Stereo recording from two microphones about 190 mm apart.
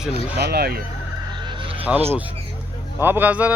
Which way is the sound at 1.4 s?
25° right (ahead or behind).